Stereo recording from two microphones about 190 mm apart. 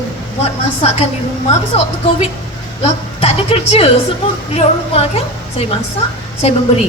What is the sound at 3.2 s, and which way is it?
A woman's voice, 30° left (ahead or behind).